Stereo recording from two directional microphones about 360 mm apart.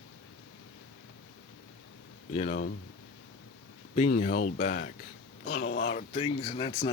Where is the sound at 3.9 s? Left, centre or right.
Centre.